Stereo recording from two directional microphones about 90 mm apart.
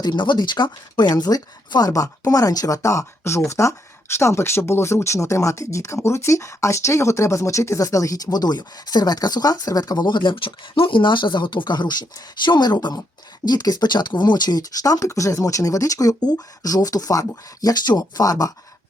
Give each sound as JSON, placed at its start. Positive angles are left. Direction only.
{"t": 0.0, "sound": "speech", "side_deg": 60}